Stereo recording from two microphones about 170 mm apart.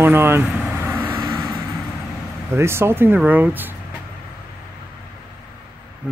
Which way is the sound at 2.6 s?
15° right (ahead or behind).